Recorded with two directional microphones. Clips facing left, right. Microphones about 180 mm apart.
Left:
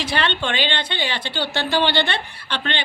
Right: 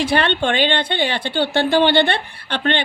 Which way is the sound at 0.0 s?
55° right (ahead or behind).